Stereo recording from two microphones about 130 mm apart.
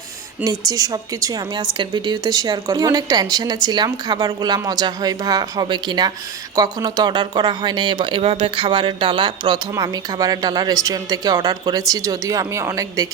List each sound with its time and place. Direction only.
0.4 s speech: 30° right (ahead or behind)